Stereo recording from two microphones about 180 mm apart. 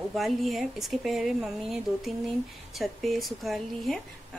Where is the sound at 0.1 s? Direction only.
Centre (ahead or behind).